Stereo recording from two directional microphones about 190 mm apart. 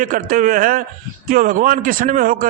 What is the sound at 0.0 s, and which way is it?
A man's voice, 45° right (ahead or behind).